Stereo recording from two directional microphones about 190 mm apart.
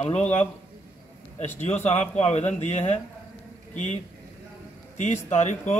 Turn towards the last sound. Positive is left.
turn(degrees=40)  # may be behind; listen again after turning